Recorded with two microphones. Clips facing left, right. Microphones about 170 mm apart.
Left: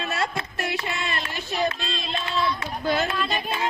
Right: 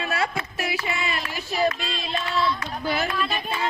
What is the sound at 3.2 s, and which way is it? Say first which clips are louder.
Speech: even; 5° right (ahead or behind).